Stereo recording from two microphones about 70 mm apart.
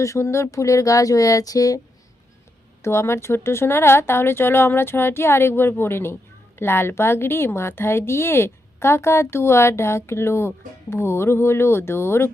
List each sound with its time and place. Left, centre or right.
0.0 s speech: left
2.8 s a woman's voice: left